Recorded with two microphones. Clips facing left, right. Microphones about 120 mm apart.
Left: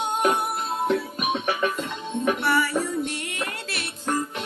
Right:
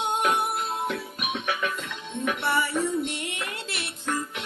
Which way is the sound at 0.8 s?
30° left (ahead or behind).